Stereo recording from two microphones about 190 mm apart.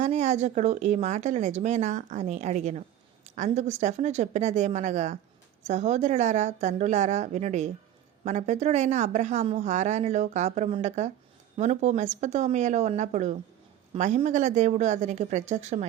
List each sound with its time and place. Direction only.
0.0 s speech: 35° right (ahead or behind)